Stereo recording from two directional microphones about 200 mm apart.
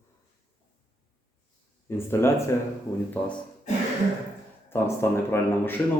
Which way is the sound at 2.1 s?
10° left (ahead or behind).